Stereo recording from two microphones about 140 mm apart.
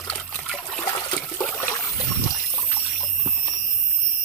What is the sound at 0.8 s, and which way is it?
Toilet flush, 35° left (ahead or behind).